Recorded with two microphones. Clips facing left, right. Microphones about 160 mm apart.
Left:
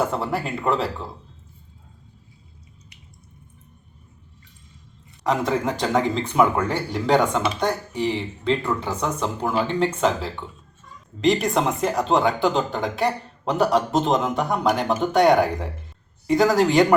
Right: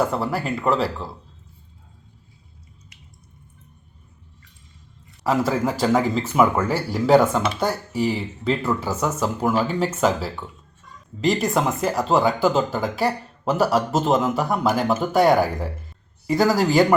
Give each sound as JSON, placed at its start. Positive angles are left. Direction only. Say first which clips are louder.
{"t": 0.0, "sound": "speech", "louder": "right 1 dB", "side_deg": 0}
{"t": 5.2, "sound": "speech", "louder": "right 1 dB", "side_deg": -5}